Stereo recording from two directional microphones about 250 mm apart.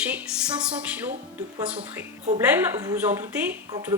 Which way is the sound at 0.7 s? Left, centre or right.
Centre.